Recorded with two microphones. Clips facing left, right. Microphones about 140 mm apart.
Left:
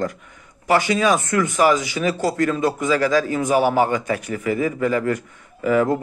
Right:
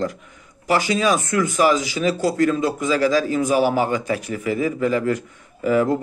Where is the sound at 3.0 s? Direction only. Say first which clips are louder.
Right 1 dB; 45° left (ahead or behind).